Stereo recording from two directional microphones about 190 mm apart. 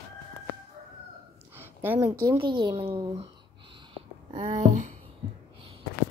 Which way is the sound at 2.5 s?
30° right (ahead or behind).